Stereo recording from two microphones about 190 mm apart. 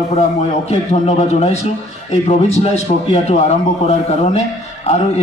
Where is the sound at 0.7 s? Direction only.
35° left (ahead or behind).